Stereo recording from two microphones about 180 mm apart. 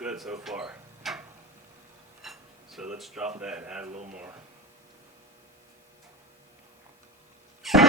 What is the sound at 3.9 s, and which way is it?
Speech, 40° right (ahead or behind).